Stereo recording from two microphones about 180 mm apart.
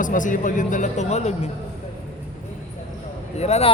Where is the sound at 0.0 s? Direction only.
45° left (ahead or behind).